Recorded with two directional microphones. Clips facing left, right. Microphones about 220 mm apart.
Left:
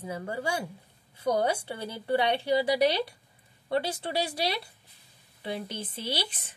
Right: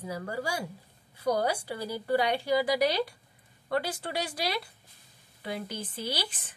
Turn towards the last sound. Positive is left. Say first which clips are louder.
# left 1 dB
turn(degrees=25)  # may be behind; listen again after turning